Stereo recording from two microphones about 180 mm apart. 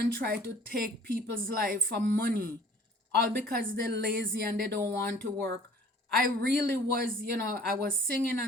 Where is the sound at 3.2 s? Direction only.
55° right (ahead or behind).